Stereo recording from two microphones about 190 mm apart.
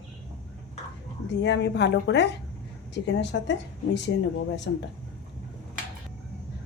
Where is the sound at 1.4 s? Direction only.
70° left (ahead or behind).